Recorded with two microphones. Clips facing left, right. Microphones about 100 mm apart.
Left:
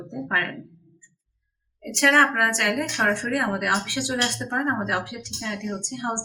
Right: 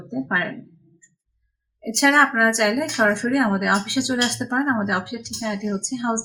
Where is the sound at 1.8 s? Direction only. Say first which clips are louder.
Right 2 dB; 20° right (ahead or behind).